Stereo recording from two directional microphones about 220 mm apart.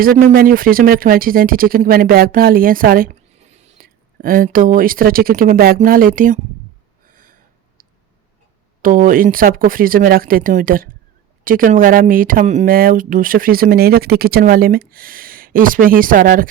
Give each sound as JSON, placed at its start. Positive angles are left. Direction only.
{"t": 0.0, "sound": "speech", "side_deg": -40}
{"t": 7.1, "sound": "a sound", "side_deg": -40}
{"t": 8.8, "sound": "speech", "side_deg": -40}